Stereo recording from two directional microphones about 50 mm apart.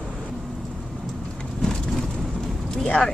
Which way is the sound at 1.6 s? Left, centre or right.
Centre.